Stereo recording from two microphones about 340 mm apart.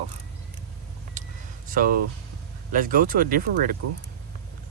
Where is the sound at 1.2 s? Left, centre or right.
Right.